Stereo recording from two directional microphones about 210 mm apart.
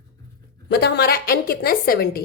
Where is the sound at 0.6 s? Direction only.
50° left (ahead or behind).